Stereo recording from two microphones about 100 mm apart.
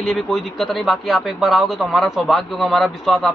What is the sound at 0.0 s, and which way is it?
A man's voice, centre (ahead or behind).